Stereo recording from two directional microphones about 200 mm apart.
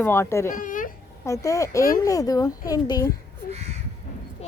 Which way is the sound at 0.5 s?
40° left (ahead or behind).